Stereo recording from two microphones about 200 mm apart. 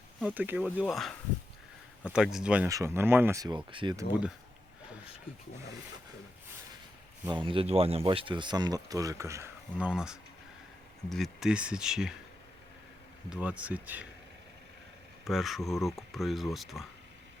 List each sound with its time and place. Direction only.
0.3 s speech: 10° right (ahead or behind)
2.1 s speech: 5° right (ahead or behind); by 4.0 s 25° right (ahead or behind)
7.4 s speech: 30° right (ahead or behind); by 12.1 s 5° right (ahead or behind)
13.3 s speech: 5° right (ahead or behind)
15.2 s speech: centre (ahead or behind)